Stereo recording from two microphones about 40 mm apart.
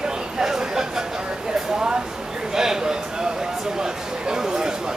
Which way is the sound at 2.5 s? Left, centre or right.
Centre.